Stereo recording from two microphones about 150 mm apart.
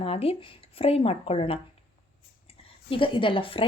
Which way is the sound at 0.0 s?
40° left (ahead or behind).